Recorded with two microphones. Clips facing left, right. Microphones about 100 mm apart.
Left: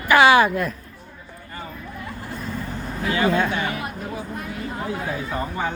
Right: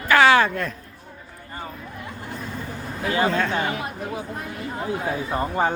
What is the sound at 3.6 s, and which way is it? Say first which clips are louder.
Speech: even; 25° right (ahead or behind).